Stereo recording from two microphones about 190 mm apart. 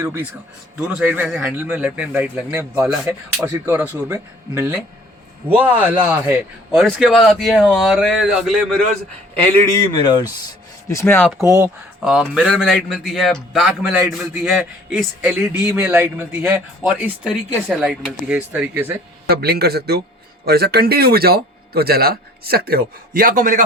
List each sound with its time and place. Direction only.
0.9 s a man's voice: 10° right (ahead or behind)
10.0 s speech: 20° left (ahead or behind)
11.4 s a man's voice: 15° right (ahead or behind)
12.0 s a man's voice: 5° right (ahead or behind)
19.3 s speech: 55° right (ahead or behind)